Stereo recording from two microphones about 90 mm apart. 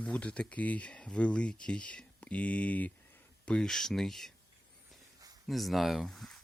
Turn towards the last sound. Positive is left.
turn(degrees=0)  # may be behind; listen again after turning